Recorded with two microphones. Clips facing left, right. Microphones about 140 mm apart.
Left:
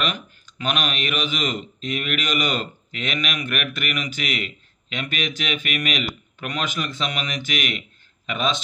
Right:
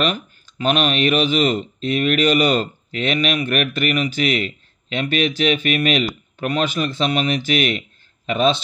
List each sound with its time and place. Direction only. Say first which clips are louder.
0.0 s a man's voice: right 6 dB; 40° right (ahead or behind)